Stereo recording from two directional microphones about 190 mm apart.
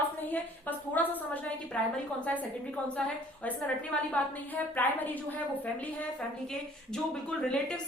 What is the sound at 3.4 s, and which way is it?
A woman's voice, 5° left (ahead or behind).